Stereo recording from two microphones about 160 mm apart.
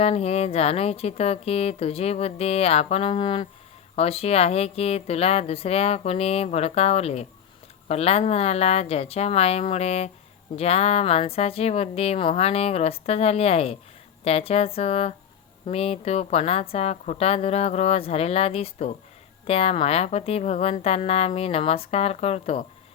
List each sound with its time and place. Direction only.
0.0 s speech: 40° left (ahead or behind)